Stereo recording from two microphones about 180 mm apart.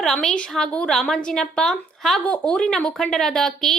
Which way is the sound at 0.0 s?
5° left (ahead or behind).